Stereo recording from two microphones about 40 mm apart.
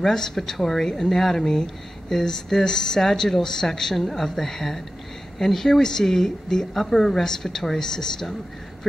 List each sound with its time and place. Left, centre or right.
0.0 s a woman's voice: centre